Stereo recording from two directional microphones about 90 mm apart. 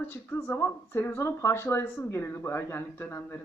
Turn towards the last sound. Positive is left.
turn(degrees=25)  # may be behind; listen again after turning